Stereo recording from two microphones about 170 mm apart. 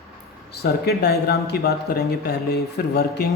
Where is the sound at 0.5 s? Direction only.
75° left (ahead or behind).